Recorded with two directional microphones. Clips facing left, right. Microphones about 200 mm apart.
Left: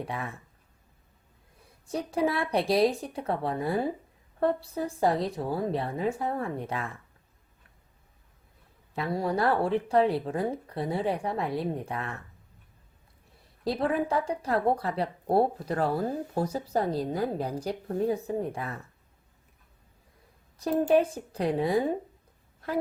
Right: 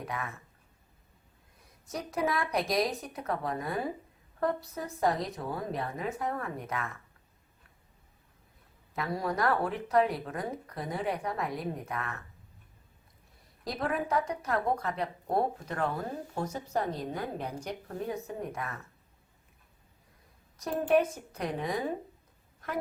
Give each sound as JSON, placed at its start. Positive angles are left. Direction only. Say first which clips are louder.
{"t": 0.0, "sound": "speech", "louder": "left 3 dB", "side_deg": 30}
{"t": 1.9, "sound": "speech", "louder": "left 4 dB", "side_deg": 30}
{"t": 9.0, "sound": "speech", "louder": "left 4 dB", "side_deg": 30}
{"t": 13.7, "sound": "speech", "louder": "left 5 dB", "side_deg": 30}
{"t": 20.6, "sound": "a woman's voice", "louder": "left 3 dB", "side_deg": 30}